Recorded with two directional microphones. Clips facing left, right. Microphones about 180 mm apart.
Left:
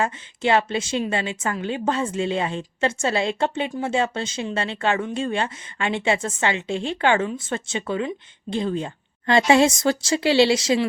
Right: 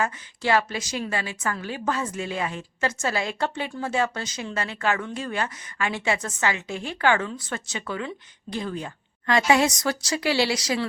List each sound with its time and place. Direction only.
0.0 s speech: 25° left (ahead or behind)